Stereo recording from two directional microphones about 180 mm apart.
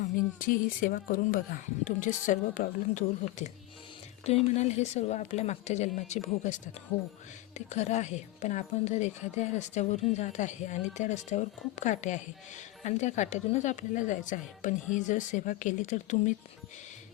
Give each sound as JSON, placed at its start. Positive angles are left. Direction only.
{"t": 0.0, "sound": "speech", "side_deg": 50}
{"t": 7.7, "sound": "speech", "side_deg": 40}